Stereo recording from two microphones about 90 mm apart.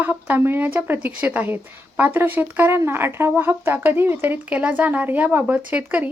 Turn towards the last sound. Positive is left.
turn(degrees=-20)  # may be behind; listen again after turning